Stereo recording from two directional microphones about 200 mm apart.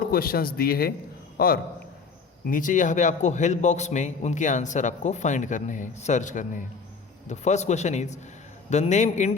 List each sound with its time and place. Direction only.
0.0 s speech: 50° left (ahead or behind)
2.5 s a man's voice: 40° left (ahead or behind)